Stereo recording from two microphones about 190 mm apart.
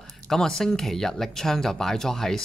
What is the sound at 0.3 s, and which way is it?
Speech, 5° left (ahead or behind).